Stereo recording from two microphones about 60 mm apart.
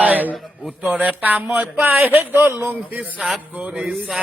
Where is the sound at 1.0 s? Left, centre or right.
Right.